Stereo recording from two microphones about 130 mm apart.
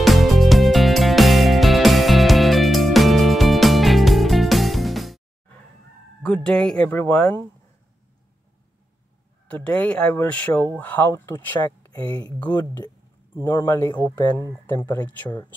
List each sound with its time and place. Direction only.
0.0 s music: centre (ahead or behind)
6.2 s speech: 10° left (ahead or behind)
9.5 s speech: 10° left (ahead or behind)